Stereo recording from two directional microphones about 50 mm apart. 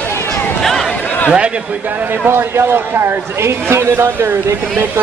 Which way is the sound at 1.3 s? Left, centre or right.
Right.